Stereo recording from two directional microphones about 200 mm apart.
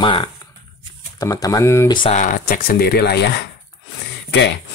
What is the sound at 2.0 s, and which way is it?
Speech, 30° left (ahead or behind).